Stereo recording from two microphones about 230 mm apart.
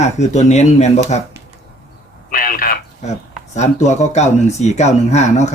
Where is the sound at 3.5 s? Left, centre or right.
Left.